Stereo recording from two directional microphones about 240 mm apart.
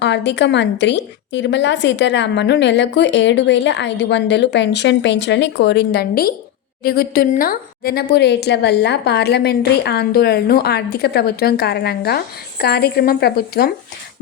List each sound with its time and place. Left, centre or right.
0.0 s a woman's voice: left